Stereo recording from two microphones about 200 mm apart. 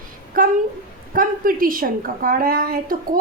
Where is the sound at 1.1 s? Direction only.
45° right (ahead or behind).